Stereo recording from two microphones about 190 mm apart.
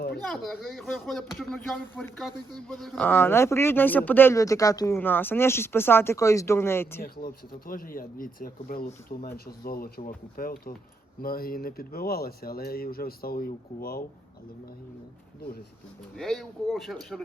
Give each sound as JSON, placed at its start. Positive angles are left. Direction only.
{"t": 0.3, "sound": "speech", "side_deg": 0}
{"t": 7.0, "sound": "speech", "side_deg": 50}
{"t": 16.1, "sound": "speech", "side_deg": 0}